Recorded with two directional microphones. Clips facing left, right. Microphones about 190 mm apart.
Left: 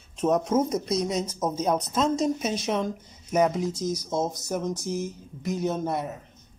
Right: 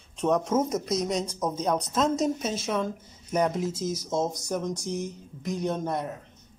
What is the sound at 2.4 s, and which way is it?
Speech, 15° left (ahead or behind).